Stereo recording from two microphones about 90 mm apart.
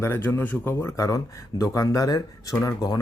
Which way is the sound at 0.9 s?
40° left (ahead or behind).